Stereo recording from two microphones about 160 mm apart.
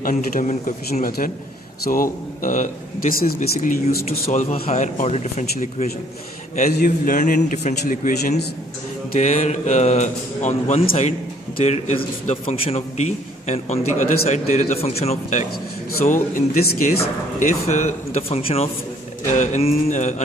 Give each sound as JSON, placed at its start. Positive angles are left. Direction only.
{"t": 0.0, "sound": "a man's voice", "side_deg": 55}
{"t": 16.3, "sound": "a man's voice", "side_deg": 60}
{"t": 17.4, "sound": "speech", "side_deg": 45}